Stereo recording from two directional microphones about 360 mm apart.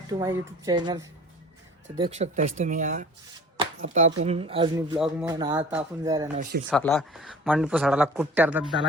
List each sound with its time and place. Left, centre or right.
0.1 s speech: centre
4.2 s speech: centre
4.9 s speech: centre
5.3 s speech: centre
6.3 s speech: right
6.7 s speech: centre